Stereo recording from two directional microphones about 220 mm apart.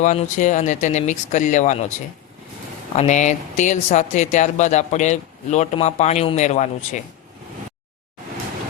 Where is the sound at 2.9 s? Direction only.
30° left (ahead or behind).